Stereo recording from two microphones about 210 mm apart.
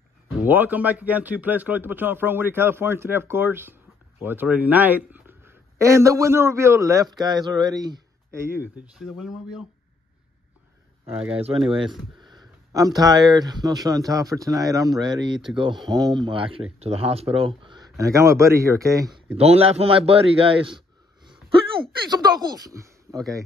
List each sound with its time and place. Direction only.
0.5 s a man's voice: 10° right (ahead or behind)
11.3 s a man's voice: 25° right (ahead or behind)
19.3 s a man's voice: 30° right (ahead or behind)
22.1 s a man's voice: 20° right (ahead or behind)